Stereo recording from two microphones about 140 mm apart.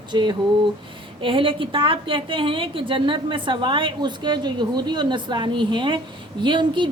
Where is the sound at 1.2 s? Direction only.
35° right (ahead or behind).